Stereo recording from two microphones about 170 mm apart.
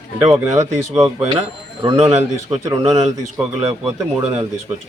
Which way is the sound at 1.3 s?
30° right (ahead or behind).